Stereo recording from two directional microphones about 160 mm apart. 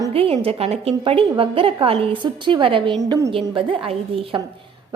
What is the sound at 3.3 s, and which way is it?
A woman's voice, 30° right (ahead or behind).